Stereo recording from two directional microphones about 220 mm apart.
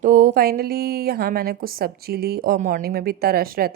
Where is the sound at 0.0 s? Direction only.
35° right (ahead or behind).